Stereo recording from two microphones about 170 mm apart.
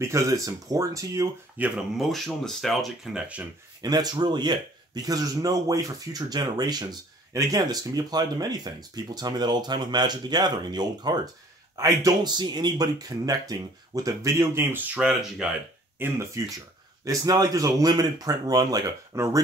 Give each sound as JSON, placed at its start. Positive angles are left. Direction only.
{"t": 0.0, "sound": "speech", "side_deg": -20}
{"t": 2.0, "sound": "speech", "side_deg": 0}
{"t": 3.8, "sound": "speech", "side_deg": -25}
{"t": 15.0, "sound": "speech", "side_deg": -5}
{"t": 16.0, "sound": "speech", "side_deg": -15}